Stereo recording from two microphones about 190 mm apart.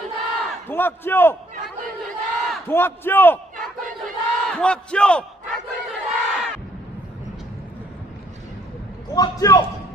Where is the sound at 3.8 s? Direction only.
45° right (ahead or behind).